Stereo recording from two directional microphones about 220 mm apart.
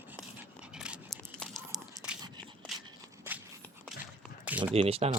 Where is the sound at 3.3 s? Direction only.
10° right (ahead or behind).